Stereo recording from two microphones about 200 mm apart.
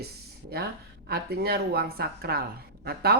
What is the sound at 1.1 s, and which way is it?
A woman's voice, 50° right (ahead or behind).